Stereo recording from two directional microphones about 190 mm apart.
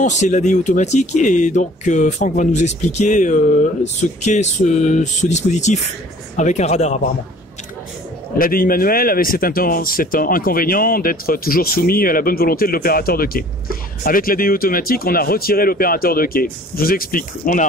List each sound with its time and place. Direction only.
0.0 s speech: 40° left (ahead or behind)
8.4 s speech: 50° left (ahead or behind)